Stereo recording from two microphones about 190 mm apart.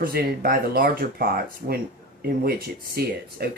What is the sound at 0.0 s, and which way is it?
Speech, 50° right (ahead or behind).